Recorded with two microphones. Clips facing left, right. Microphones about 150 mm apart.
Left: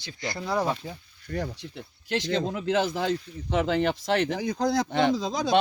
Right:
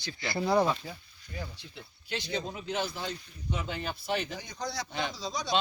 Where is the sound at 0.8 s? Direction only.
20° left (ahead or behind).